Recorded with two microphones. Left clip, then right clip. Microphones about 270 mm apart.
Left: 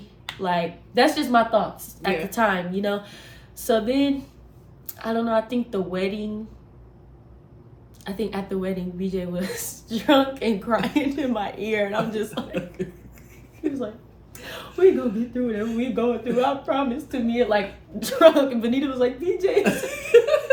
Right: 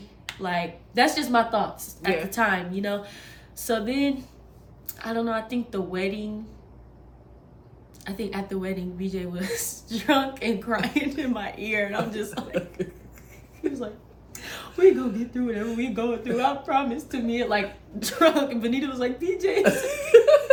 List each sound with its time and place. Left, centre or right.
0.0 s a woman's voice: centre
8.0 s a woman's voice: centre
12.5 s cough: centre
14.3 s a sound: centre
15.4 s a woman's voice: centre
19.6 s chuckle: centre